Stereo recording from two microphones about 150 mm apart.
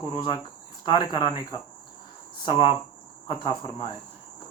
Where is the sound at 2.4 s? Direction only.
35° left (ahead or behind).